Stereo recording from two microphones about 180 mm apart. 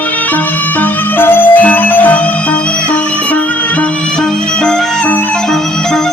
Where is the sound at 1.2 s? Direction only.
10° left (ahead or behind).